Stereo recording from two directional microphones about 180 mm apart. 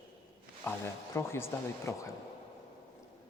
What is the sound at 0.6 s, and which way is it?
A woman's voice, 15° left (ahead or behind).